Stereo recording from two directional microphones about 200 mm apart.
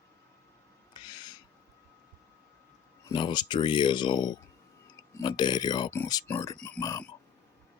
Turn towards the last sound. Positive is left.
turn(degrees=15)  # may be behind; listen again after turning